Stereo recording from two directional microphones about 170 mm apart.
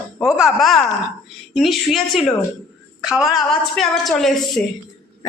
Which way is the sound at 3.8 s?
Centre (ahead or behind).